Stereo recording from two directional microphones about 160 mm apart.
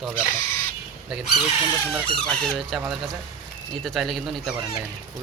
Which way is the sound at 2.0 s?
5° left (ahead or behind).